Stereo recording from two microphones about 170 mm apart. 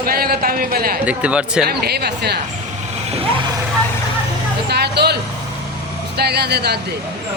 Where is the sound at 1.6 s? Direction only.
70° right (ahead or behind).